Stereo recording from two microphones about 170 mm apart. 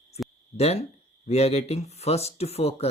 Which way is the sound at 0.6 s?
35° left (ahead or behind).